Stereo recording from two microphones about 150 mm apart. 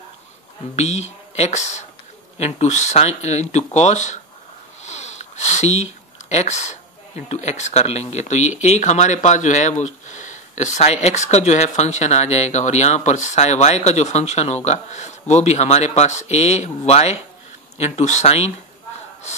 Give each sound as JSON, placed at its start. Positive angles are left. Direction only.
{"t": 0.7, "sound": "speech", "side_deg": 45}